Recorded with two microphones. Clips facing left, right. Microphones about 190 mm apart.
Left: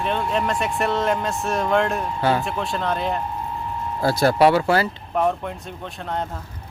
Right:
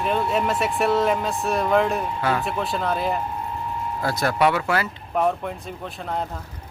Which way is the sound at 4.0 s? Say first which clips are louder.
Left 5 dB; 30° left (ahead or behind).